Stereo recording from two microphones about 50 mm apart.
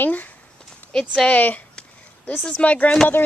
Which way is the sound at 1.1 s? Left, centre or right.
Left.